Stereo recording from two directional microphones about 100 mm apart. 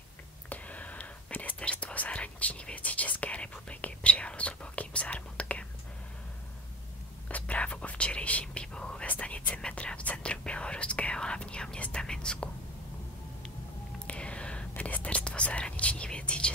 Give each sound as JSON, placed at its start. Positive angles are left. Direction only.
{"t": 0.5, "sound": "whispering", "side_deg": 15}
{"t": 7.2, "sound": "whispering", "side_deg": 15}
{"t": 14.0, "sound": "whispering", "side_deg": 10}